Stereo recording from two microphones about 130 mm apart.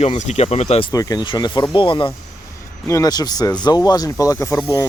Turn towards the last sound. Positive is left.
turn(degrees=20)  # may be behind; listen again after turning